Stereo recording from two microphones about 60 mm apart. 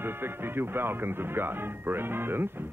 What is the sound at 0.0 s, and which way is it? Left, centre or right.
Speech, right.